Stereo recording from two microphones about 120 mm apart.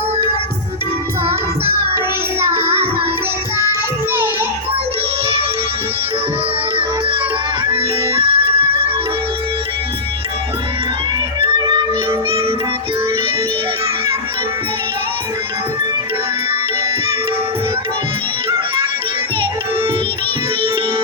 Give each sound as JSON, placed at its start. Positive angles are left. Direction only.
{"t": 2.5, "sound": "music", "side_deg": -55}
{"t": 7.7, "sound": "music", "side_deg": -50}
{"t": 11.6, "sound": "music", "side_deg": -40}